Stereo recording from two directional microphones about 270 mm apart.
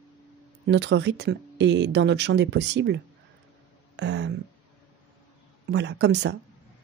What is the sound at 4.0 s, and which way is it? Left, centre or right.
Speech, right.